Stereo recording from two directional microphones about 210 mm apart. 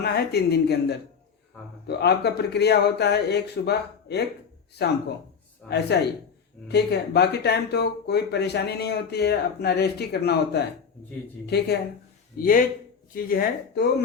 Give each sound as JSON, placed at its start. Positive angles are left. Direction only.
{"t": 0.0, "sound": "speech", "side_deg": 50}